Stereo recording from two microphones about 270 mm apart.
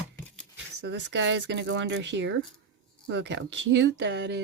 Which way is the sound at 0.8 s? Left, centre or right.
Right.